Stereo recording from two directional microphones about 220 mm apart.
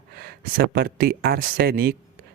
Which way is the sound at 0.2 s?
45° right (ahead or behind).